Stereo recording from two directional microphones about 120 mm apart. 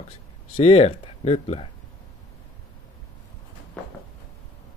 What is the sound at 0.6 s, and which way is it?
Speech, 60° left (ahead or behind).